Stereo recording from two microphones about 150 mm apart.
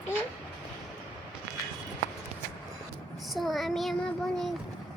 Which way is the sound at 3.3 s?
Centre (ahead or behind).